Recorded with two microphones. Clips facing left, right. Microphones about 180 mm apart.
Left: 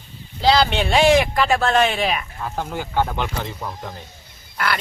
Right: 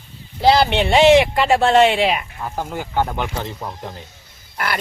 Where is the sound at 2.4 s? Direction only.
10° right (ahead or behind).